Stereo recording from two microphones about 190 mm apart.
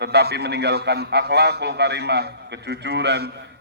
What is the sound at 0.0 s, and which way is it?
A man's voice, 60° right (ahead or behind).